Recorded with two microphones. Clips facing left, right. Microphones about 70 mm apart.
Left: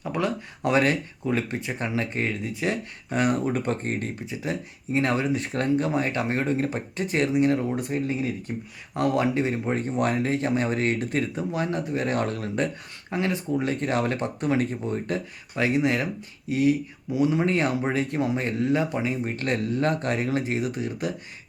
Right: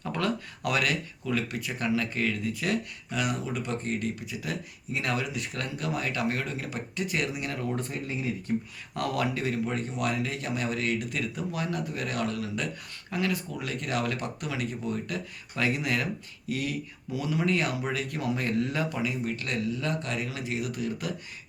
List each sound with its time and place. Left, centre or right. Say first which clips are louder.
0.0 s a sound: left 4 dB; centre
0.6 s speech: left 7 dB; left
3.1 s speech: left 7 dB; left